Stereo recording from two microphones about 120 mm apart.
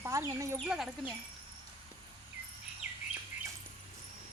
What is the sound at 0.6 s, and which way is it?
Speech, 5° right (ahead or behind).